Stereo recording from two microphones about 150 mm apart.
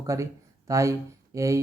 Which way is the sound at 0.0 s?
20° right (ahead or behind).